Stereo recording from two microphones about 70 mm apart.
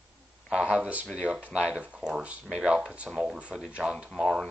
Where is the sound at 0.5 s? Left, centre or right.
Centre.